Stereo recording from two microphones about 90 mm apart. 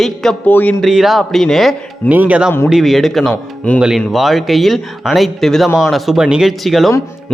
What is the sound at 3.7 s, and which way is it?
Speech, 15° left (ahead or behind).